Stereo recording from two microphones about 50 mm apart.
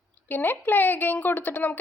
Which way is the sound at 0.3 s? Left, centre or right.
Left.